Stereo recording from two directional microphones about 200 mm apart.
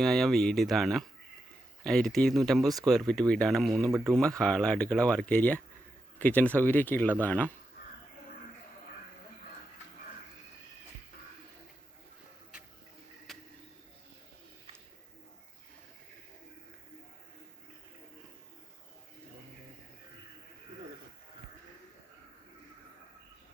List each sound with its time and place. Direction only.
0.0 s speech: centre (ahead or behind)
3.8 s speech: 15° right (ahead or behind)
4.1 s speech: 5° left (ahead or behind)
13.3 s a sound: centre (ahead or behind)